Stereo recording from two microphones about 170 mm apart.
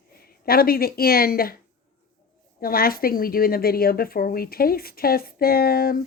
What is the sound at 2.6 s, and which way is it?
Speech, 60° left (ahead or behind).